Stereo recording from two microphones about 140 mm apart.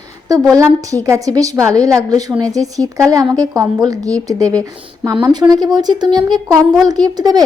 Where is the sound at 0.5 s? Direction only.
25° right (ahead or behind).